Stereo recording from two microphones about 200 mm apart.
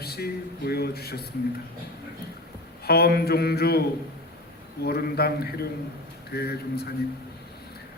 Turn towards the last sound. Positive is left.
turn(degrees=50)  # may be behind; listen again after turning